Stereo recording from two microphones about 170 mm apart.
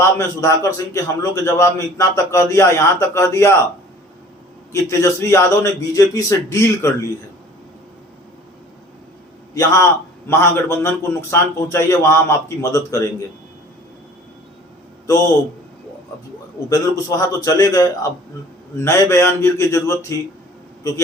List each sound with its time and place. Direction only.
0.0 s a man's voice: 20° left (ahead or behind)
4.7 s a man's voice: 15° left (ahead or behind)
9.6 s a man's voice: 20° left (ahead or behind)
15.0 s a man's voice: 20° left (ahead or behind)
17.1 s a man's voice: 20° left (ahead or behind)